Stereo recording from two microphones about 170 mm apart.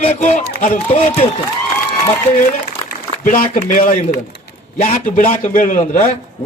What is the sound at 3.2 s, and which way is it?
A man's voice, 50° left (ahead or behind).